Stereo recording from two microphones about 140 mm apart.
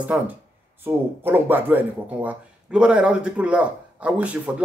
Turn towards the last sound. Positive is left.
turn(degrees=-10)  # may be behind; listen again after turning